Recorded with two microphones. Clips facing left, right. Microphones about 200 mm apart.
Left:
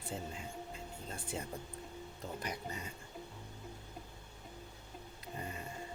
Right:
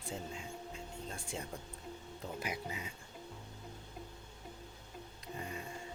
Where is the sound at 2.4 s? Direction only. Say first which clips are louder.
Right 1 dB; 5° right (ahead or behind).